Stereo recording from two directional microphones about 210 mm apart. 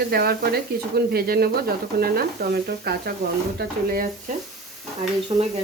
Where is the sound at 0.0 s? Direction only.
50° right (ahead or behind).